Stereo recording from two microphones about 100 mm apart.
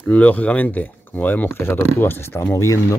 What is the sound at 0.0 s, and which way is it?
Speech, 15° left (ahead or behind).